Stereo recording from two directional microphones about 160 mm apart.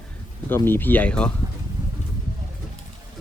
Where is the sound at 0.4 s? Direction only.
15° left (ahead or behind).